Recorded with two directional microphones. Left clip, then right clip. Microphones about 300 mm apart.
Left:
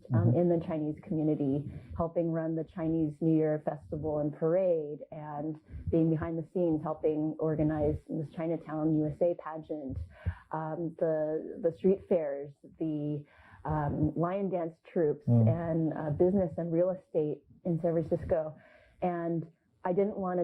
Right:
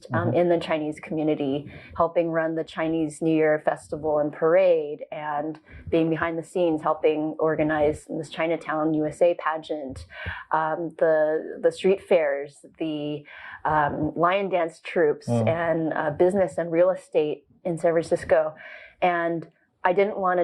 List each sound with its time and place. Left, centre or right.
0.1 s speech: centre
2.0 s speech: centre
7.2 s speech: right
7.5 s speech: centre
12.9 s speech: right
13.5 s speech: centre
14.3 s speech: centre